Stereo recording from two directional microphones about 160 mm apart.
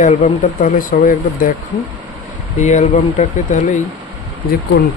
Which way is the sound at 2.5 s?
50° left (ahead or behind).